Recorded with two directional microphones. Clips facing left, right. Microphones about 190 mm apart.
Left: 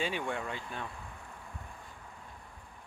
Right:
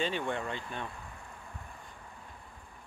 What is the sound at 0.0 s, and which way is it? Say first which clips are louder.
Speech: right 2 dB; 10° left (ahead or behind).